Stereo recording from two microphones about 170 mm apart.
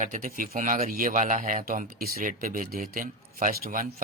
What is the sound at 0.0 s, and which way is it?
A man's voice, 50° right (ahead or behind).